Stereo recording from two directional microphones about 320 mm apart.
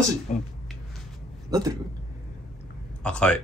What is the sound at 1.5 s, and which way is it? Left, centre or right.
Speech, centre.